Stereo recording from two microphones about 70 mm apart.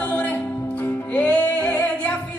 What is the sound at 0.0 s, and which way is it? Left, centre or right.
Music, left.